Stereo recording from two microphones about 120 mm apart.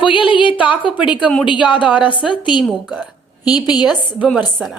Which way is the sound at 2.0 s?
40° left (ahead or behind).